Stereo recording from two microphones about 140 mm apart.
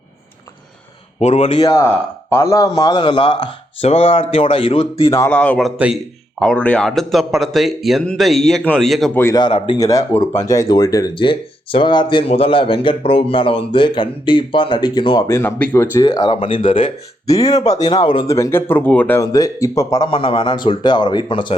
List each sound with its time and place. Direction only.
1.2 s speech: 50° left (ahead or behind)
1.6 s speech: 25° left (ahead or behind); by 5.1 s 40° left (ahead or behind)
5.1 s speech: 20° left (ahead or behind)
5.4 s a man's voice: 5° left (ahead or behind)
9.3 s speech: 30° left (ahead or behind)
15.3 s speech: 15° left (ahead or behind)
16.0 s speech: 25° left (ahead or behind)
16.3 s speech: 40° left (ahead or behind)
17.4 s speech: 25° left (ahead or behind)
18.3 s speech: 20° left (ahead or behind)
19.2 s speech: 25° left (ahead or behind)
20.1 s speech: 40° left (ahead or behind)